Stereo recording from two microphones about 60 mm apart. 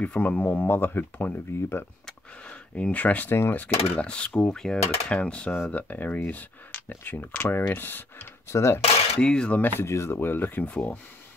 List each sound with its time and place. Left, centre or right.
0.0 s speech: left
2.4 s speech: left
8.5 s speech: left
9.2 s speech: centre
9.5 s speech: left
9.8 s speech: left